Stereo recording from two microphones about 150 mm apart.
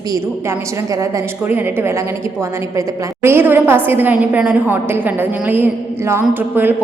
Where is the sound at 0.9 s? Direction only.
15° right (ahead or behind).